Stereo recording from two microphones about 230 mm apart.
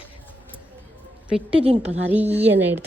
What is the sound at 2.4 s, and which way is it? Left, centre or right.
Speech, right.